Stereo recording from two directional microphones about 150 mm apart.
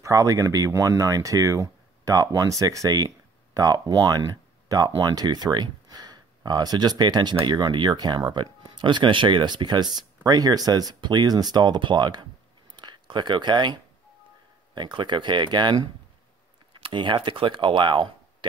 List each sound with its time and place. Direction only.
0.0 s speech: 20° right (ahead or behind)
12.7 s a sound: 30° right (ahead or behind)
14.7 s speech: 30° right (ahead or behind)